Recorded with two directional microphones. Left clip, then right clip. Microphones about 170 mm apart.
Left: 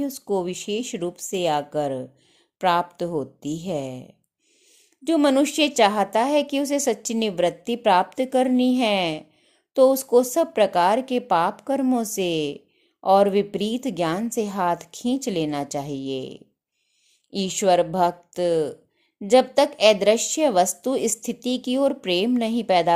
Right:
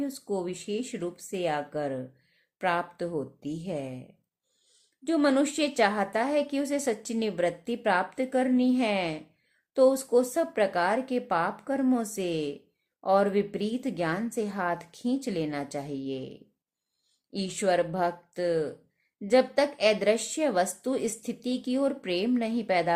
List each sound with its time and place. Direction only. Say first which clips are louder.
0.0 s a woman's voice: left 7 dB; 30° left (ahead or behind)